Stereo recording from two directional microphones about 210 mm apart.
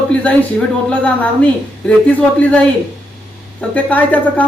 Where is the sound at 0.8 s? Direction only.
5° left (ahead or behind).